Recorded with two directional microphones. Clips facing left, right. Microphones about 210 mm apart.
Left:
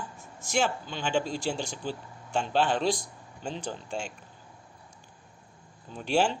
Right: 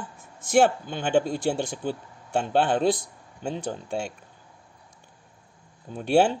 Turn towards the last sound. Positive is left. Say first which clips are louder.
# right 6 dB
turn(degrees=-60)  # may be behind; listen again after turning